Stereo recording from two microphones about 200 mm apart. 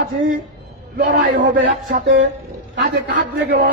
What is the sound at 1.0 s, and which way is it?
Speech, 50° right (ahead or behind).